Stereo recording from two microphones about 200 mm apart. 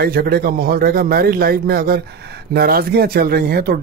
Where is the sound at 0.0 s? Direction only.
50° right (ahead or behind).